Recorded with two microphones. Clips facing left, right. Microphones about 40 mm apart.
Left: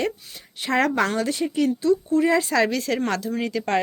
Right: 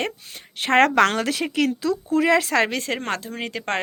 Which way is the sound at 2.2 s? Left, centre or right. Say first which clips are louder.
Right 1 dB; right.